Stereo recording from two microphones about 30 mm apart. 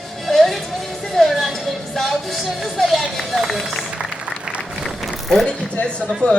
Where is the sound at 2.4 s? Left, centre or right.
Centre.